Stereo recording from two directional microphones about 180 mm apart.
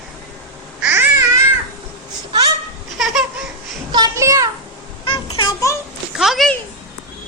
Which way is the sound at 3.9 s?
20° right (ahead or behind).